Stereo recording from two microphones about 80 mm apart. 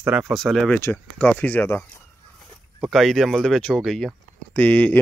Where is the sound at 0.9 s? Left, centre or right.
Centre.